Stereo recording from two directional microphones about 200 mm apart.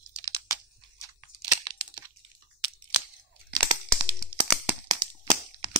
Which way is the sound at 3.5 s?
20° right (ahead or behind).